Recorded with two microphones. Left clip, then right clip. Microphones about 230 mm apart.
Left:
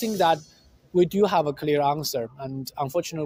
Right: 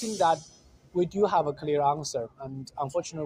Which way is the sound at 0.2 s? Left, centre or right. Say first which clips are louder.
Left 2 dB; left.